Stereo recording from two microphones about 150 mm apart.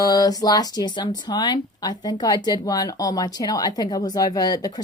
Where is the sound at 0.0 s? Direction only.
25° left (ahead or behind).